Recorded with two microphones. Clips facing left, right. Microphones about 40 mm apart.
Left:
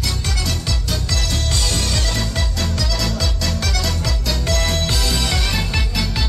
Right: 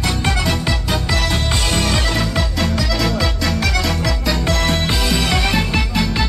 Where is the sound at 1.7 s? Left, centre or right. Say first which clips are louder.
Right 5 dB; right.